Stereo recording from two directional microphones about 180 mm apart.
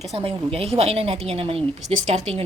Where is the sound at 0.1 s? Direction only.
30° right (ahead or behind).